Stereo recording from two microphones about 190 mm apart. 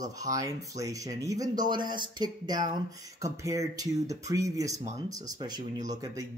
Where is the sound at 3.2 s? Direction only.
15° right (ahead or behind).